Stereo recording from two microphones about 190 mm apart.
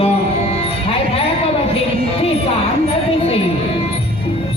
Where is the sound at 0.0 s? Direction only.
30° left (ahead or behind).